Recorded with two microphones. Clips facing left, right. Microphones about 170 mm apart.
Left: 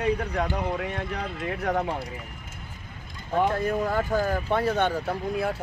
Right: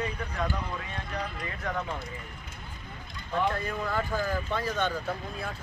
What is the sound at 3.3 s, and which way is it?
Speech, 45° left (ahead or behind).